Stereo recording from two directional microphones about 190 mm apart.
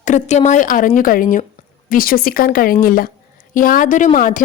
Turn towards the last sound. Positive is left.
turn(degrees=45)  # may be behind; listen again after turning